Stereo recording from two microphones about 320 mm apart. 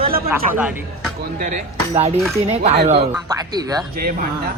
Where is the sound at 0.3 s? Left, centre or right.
Centre.